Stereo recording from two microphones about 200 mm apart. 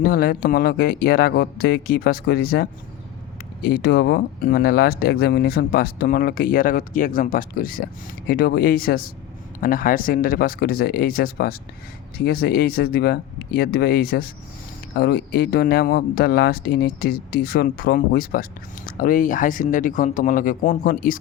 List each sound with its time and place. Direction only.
0.0 s speech: 50° left (ahead or behind)